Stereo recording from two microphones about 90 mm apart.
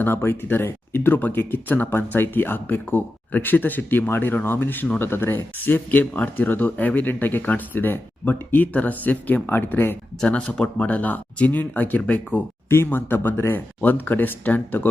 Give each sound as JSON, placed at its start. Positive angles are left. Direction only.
{"t": 0.0, "sound": "speech", "side_deg": 25}
{"t": 10.2, "sound": "speech", "side_deg": 10}